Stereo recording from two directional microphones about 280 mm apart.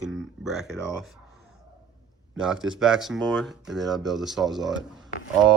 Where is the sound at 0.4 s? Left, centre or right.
Centre.